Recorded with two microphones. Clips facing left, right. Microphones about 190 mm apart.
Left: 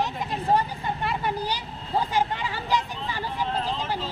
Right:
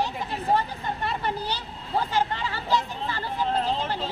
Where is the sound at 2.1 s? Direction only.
15° left (ahead or behind).